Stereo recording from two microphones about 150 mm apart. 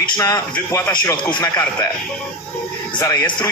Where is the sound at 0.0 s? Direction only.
20° left (ahead or behind).